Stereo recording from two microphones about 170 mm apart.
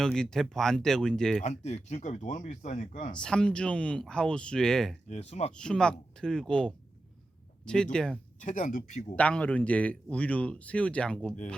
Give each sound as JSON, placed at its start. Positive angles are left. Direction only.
{"t": 0.0, "sound": "speech", "side_deg": 5}
{"t": 1.4, "sound": "speech", "side_deg": 40}
{"t": 3.2, "sound": "speech", "side_deg": 5}
{"t": 5.0, "sound": "speech", "side_deg": 40}
{"t": 5.5, "sound": "speech", "side_deg": 5}
{"t": 8.4, "sound": "speech", "side_deg": 50}
{"t": 9.1, "sound": "a man's voice", "side_deg": 5}